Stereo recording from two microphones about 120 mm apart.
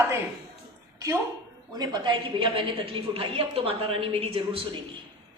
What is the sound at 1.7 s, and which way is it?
A woman's voice, 35° right (ahead or behind).